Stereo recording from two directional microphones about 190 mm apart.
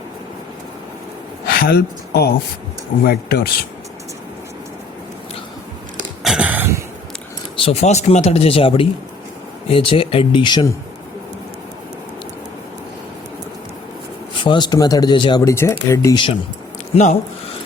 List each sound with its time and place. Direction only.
1.5 s speech: 50° left (ahead or behind)
6.2 s gasp: 5° right (ahead or behind)
7.5 s speech: 30° left (ahead or behind)
14.4 s speech: 25° left (ahead or behind)
16.9 s speech: 40° left (ahead or behind)